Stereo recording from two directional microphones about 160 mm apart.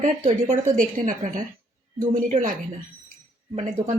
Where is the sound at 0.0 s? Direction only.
50° right (ahead or behind).